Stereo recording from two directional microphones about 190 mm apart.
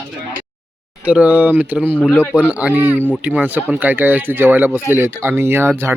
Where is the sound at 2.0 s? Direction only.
10° left (ahead or behind).